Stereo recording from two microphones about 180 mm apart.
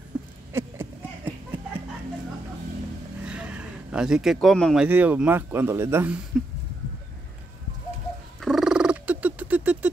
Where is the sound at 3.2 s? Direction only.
5° right (ahead or behind).